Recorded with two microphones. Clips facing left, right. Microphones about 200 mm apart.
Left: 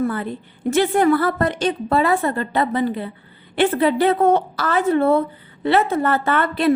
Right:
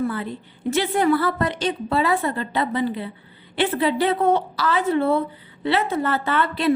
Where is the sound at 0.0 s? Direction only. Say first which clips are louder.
Left 3 dB; 50° left (ahead or behind).